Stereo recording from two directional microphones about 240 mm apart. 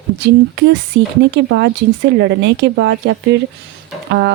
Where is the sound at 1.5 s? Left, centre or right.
Right.